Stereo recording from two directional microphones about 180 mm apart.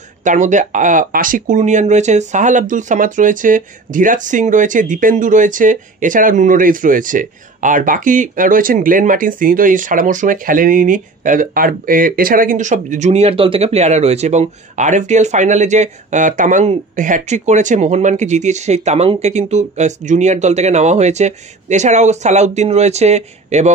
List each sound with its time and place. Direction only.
0.2 s speech: 45° right (ahead or behind)